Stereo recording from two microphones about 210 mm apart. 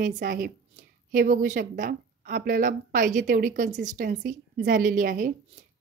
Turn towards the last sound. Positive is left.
turn(degrees=-40)  # may be behind; listen again after turning